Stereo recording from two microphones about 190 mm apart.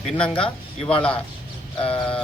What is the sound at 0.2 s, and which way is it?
Speech, 5° left (ahead or behind).